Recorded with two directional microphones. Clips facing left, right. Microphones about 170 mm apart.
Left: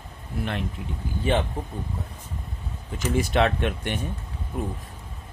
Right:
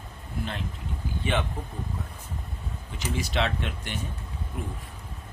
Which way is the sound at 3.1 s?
50° left (ahead or behind).